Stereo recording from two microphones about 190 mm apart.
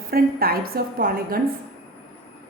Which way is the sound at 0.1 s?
50° right (ahead or behind).